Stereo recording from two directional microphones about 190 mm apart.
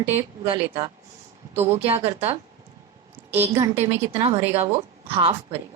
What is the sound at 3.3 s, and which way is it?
Speech, 10° right (ahead or behind).